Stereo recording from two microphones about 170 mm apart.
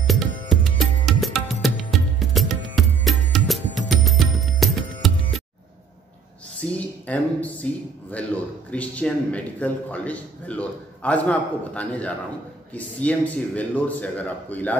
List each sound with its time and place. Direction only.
0.0 s music: centre (ahead or behind)
6.6 s a sound: 10° left (ahead or behind)
8.7 s a man's voice: 10° left (ahead or behind)